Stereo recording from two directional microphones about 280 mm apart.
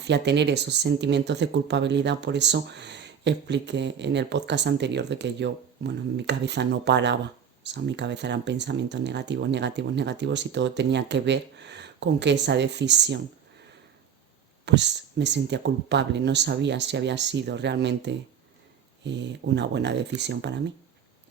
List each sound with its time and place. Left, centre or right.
0.0 s speech: right
14.6 s speech: right